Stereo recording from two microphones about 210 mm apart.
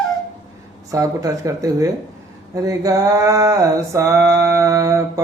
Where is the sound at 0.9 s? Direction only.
15° right (ahead or behind).